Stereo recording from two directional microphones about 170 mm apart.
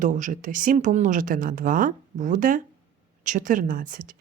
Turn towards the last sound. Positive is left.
turn(degrees=-50)  # may be behind; listen again after turning